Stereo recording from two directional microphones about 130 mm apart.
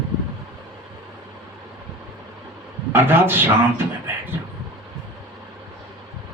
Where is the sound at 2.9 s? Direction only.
15° right (ahead or behind).